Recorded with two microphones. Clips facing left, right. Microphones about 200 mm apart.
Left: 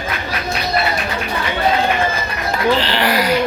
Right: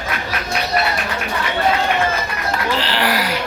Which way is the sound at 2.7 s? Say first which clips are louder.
Left 2 dB; 5° right (ahead or behind).